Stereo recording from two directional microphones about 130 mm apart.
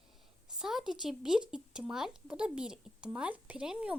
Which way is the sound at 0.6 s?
5° right (ahead or behind).